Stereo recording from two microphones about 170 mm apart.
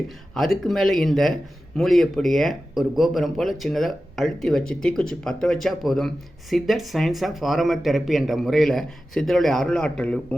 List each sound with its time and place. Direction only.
0.3 s speech: centre (ahead or behind)